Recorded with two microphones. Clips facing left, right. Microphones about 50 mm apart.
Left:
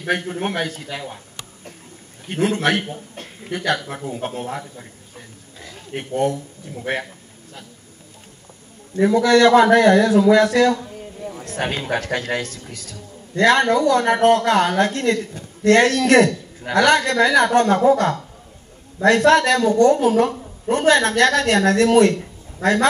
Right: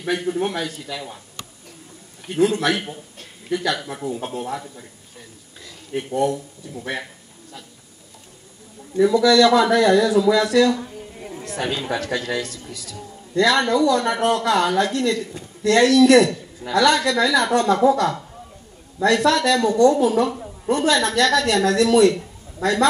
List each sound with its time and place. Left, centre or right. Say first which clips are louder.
0.0 s a man's voice: even; left
2.2 s a man's voice: right 1 dB; left
5.6 s a sound: right 2 dB; left
6.8 s a man's voice: left 4 dB; left
8.9 s a man's voice: even; left